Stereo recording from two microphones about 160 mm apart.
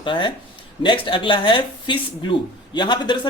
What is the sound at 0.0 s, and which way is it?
A man's voice, 30° left (ahead or behind).